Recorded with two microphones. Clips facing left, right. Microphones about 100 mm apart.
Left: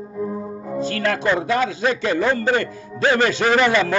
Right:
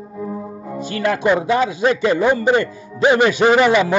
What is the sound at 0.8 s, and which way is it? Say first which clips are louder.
A man's voice: right 2 dB; 15° right (ahead or behind).